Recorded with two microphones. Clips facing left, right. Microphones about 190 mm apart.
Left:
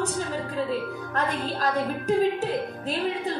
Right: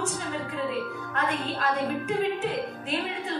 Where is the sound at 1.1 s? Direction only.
35° left (ahead or behind).